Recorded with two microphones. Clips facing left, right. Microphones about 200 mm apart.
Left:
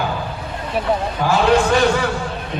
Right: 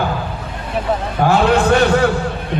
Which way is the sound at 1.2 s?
60° right (ahead or behind).